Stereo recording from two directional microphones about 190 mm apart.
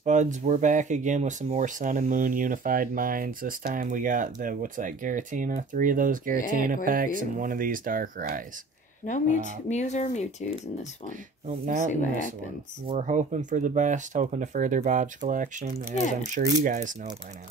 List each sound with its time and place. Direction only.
0.0 s speech: 40° right (ahead or behind)
9.0 s speech: 40° left (ahead or behind)
11.6 s speech: 45° right (ahead or behind)